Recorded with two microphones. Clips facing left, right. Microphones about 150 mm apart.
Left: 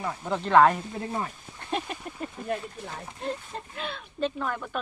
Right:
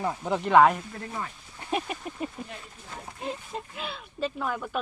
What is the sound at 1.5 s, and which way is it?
Duck, 5° right (ahead or behind).